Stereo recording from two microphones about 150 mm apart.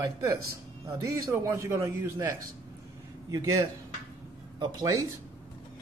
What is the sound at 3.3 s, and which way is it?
Speech, 25° right (ahead or behind).